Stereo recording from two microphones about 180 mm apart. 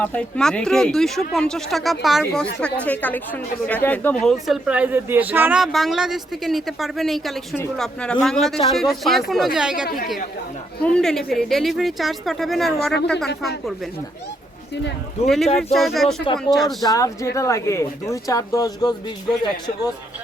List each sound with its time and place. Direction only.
0.0 s speech: 5° left (ahead or behind)
10.8 s speech: 5° left (ahead or behind)
15.5 s speech: centre (ahead or behind)
16.8 s speech: 20° left (ahead or behind)